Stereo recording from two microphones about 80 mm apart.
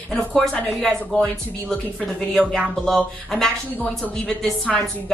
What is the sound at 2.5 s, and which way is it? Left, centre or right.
A woman's voice, centre.